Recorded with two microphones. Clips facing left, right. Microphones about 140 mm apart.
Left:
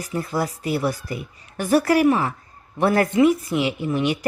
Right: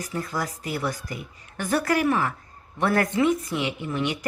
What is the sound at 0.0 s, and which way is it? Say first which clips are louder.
Speech: left 5 dB; 15° left (ahead or behind).